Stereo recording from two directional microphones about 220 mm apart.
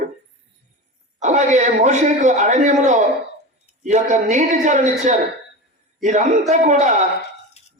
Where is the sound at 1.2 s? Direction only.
35° right (ahead or behind).